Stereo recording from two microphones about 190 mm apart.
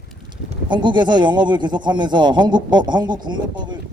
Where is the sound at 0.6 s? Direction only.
25° right (ahead or behind).